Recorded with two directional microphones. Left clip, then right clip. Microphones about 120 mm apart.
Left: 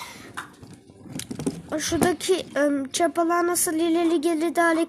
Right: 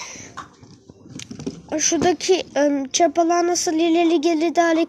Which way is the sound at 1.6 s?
5° right (ahead or behind).